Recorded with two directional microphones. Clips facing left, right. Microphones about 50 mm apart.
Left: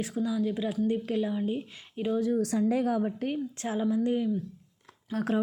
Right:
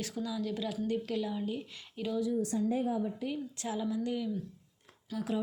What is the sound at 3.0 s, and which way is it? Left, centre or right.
A woman's voice, left.